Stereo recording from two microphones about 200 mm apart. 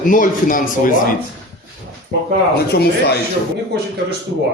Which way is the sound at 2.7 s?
55° left (ahead or behind).